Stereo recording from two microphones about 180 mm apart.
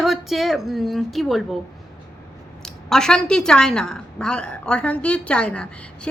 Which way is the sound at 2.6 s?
5° left (ahead or behind).